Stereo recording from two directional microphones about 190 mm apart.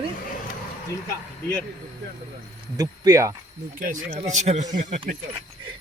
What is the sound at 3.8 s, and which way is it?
Speech, 45° right (ahead or behind).